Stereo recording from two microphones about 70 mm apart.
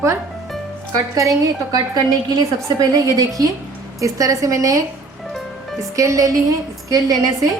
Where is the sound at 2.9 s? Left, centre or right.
Right.